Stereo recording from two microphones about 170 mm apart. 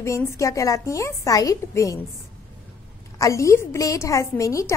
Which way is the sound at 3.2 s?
20° left (ahead or behind).